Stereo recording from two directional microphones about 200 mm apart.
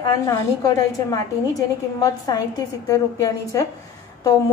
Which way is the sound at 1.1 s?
20° left (ahead or behind).